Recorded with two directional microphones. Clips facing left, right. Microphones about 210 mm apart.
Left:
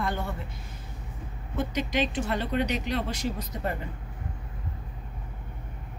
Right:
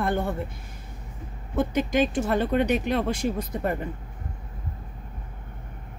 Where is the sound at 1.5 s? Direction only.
50° right (ahead or behind).